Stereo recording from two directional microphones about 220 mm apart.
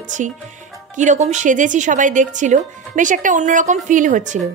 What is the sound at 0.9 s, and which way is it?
Speech, 35° right (ahead or behind).